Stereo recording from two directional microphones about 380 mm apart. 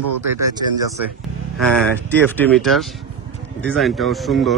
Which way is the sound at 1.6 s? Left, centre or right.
Centre.